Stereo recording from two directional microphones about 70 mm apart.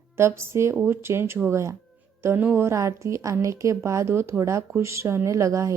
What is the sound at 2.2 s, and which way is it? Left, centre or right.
Speech, right.